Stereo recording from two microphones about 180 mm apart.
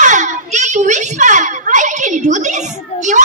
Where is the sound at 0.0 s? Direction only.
45° right (ahead or behind).